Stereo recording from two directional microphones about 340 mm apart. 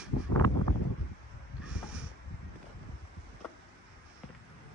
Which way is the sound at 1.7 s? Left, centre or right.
Centre.